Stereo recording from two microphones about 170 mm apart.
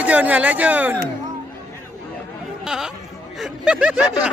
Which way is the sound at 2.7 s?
5° right (ahead or behind).